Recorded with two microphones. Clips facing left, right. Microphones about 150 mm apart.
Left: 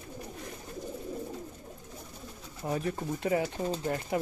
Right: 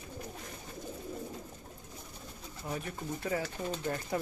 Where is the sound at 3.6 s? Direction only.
35° left (ahead or behind).